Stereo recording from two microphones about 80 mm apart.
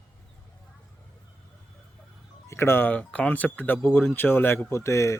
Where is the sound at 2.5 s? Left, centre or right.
Left.